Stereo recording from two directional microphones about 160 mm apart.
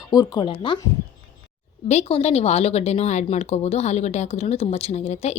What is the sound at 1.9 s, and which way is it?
Speech, 40° left (ahead or behind).